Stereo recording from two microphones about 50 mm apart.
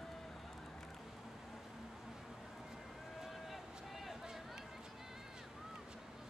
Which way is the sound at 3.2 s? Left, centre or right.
Centre.